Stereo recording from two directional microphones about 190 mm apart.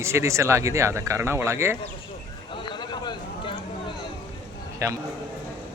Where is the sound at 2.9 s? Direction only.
25° left (ahead or behind).